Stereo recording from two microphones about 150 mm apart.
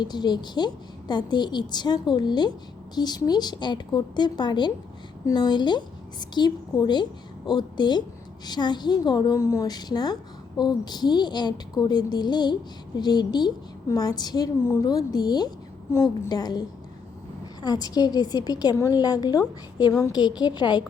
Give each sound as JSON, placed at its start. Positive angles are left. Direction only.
{"t": 0.0, "sound": "a woman's voice", "side_deg": 30}